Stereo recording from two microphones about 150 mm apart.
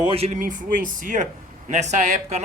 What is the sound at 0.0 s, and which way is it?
Speech, 40° right (ahead or behind).